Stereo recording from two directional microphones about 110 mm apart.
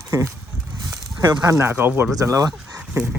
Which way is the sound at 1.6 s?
20° right (ahead or behind).